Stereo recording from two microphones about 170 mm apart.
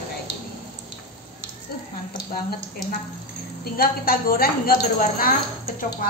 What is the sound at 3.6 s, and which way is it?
Speech, 60° left (ahead or behind).